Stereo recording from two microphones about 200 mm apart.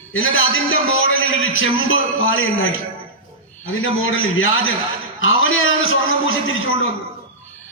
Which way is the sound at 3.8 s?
85° left.